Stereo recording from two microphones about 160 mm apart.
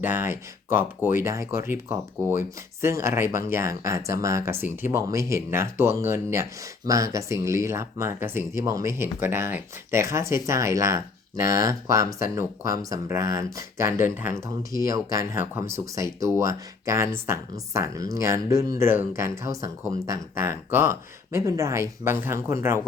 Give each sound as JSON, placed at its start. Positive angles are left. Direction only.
{"t": 0.0, "sound": "speech", "side_deg": -15}